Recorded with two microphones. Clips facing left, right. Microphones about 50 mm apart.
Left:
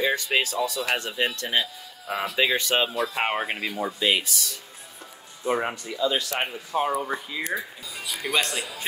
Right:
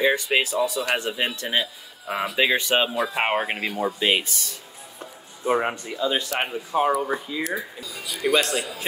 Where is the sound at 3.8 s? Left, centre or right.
Right.